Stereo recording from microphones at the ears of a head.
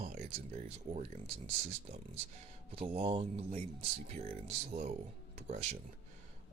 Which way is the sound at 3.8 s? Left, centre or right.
Right.